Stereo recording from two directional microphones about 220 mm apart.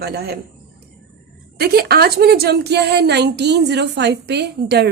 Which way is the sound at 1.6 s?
45° right (ahead or behind).